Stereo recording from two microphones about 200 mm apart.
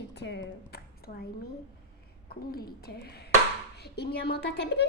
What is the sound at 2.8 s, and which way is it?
A woman's voice, 50° left (ahead or behind).